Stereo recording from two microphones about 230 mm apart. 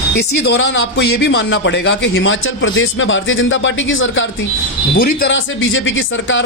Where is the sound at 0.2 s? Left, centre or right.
Left.